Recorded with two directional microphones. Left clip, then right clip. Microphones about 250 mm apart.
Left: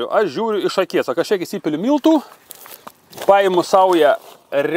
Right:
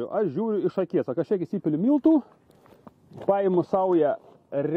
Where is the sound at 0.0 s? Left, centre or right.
Centre.